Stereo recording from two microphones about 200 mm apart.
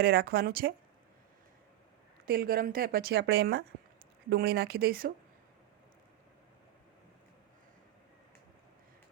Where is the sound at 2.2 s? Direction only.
50° right (ahead or behind).